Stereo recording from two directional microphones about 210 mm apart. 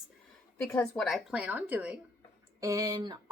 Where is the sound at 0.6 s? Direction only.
5° left (ahead or behind).